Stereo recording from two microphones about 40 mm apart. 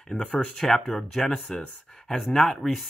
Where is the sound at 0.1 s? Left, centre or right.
Left.